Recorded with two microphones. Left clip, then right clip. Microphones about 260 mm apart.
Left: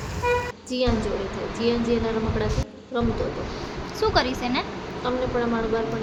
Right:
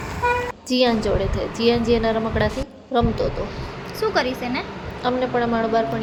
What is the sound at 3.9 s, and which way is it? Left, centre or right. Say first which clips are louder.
Speech: right 1 dB; centre.